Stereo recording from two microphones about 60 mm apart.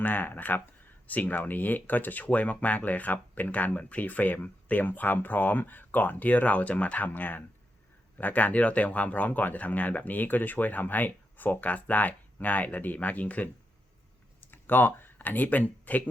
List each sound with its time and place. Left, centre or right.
0.0 s speech: left
14.4 s speech: left